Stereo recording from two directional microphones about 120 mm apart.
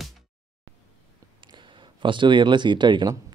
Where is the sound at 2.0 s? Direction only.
40° right (ahead or behind).